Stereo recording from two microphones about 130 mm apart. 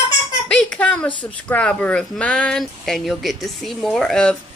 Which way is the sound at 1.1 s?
40° left (ahead or behind).